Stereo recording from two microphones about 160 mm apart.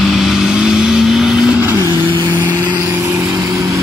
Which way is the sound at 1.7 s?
30° right (ahead or behind).